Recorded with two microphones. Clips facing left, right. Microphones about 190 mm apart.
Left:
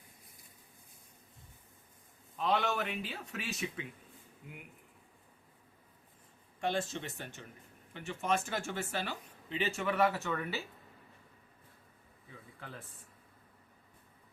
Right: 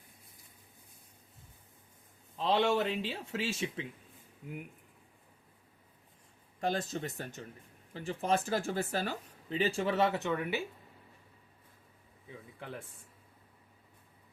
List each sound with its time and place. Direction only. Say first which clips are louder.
2.4 s speech: right 4 dB; 30° right (ahead or behind)
6.6 s speech: right 1 dB; 40° right (ahead or behind); by 10.6 s 15° right (ahead or behind)